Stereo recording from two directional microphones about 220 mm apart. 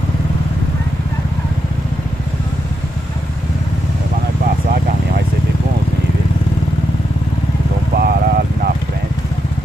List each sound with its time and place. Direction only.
7.9 s vehicle: 45° right (ahead or behind)